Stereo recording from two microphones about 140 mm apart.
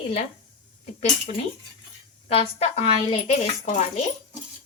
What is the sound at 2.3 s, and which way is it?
Speech, 45° left (ahead or behind).